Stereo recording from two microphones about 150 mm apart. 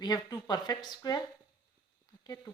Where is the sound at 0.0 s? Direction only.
25° left (ahead or behind).